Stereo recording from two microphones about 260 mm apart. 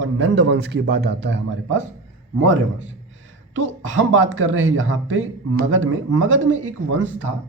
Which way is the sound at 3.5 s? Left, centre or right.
Right.